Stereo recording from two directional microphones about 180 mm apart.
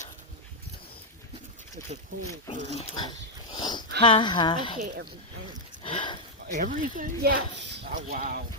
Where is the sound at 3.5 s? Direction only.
25° left (ahead or behind).